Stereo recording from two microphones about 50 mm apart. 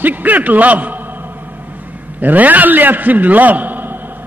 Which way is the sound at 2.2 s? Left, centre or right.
Right.